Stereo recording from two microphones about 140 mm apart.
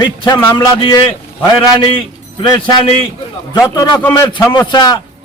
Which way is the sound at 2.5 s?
30° left (ahead or behind).